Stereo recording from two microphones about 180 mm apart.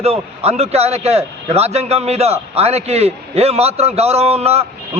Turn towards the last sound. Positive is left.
turn(degrees=-35)  # may be behind; listen again after turning